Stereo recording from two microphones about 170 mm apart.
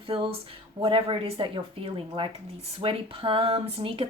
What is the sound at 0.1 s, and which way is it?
Speech, 30° right (ahead or behind).